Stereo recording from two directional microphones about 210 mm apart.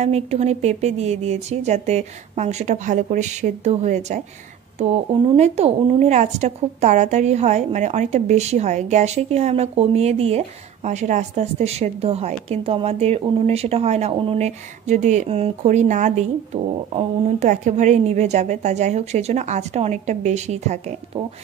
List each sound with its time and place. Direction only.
0.0 s a woman's voice: 30° right (ahead or behind)